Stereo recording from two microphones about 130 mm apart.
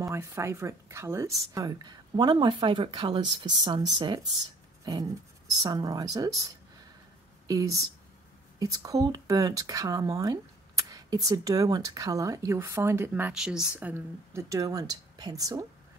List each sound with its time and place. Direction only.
0.0 s speech: 20° right (ahead or behind); by 4.2 s 40° right (ahead or behind)
4.8 s a sound: 25° right (ahead or behind)
5.6 s speech: 30° right (ahead or behind)
7.4 s speech: 25° right (ahead or behind)